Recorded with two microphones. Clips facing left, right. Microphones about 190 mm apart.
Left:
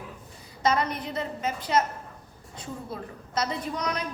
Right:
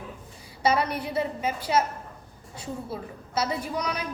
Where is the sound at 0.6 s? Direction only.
10° right (ahead or behind).